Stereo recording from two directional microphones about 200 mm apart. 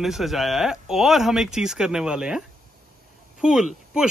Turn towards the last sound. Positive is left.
turn(degrees=-5)  # may be behind; listen again after turning